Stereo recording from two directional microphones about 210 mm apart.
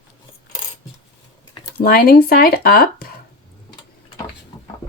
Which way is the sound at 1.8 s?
45° left (ahead or behind).